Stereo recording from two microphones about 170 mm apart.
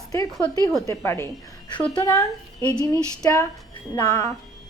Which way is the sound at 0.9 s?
15° left (ahead or behind).